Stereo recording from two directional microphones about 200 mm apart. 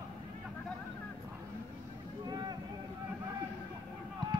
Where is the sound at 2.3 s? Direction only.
20° right (ahead or behind).